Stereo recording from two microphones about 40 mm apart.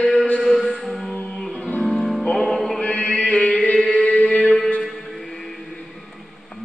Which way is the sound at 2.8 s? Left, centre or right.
Left.